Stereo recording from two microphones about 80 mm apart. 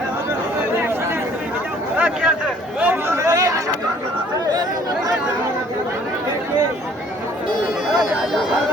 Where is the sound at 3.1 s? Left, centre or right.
Right.